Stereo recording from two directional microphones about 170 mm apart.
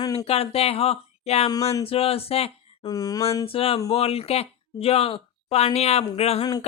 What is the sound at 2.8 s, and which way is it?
Mantra, 20° left (ahead or behind).